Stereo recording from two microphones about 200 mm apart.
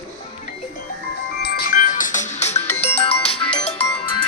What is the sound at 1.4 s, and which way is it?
Music, 50° left (ahead or behind).